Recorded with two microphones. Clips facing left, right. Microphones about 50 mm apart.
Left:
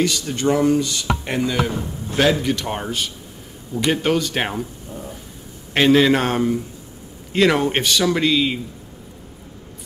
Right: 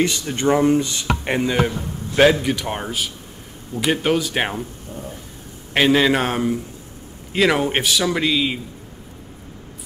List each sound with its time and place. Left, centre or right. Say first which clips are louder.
0.0 s speech: even; right
2.4 s a man's voice: even; centre